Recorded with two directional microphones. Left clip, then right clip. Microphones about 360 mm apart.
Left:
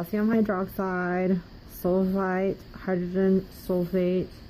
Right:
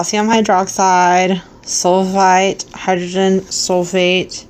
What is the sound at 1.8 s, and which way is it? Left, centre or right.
Speech, right.